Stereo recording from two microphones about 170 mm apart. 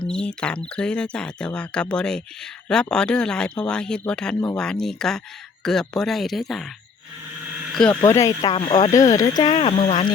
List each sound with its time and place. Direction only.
0.0 s speech: 5° left (ahead or behind)
7.9 s speech: 20° left (ahead or behind)
8.5 s speech: 35° left (ahead or behind)
8.9 s speech: 20° left (ahead or behind)
9.5 s speech: 35° left (ahead or behind)